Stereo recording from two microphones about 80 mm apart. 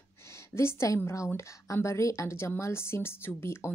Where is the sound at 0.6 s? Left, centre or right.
Left.